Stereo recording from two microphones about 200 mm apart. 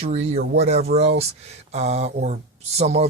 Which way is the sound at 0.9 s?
50° right (ahead or behind).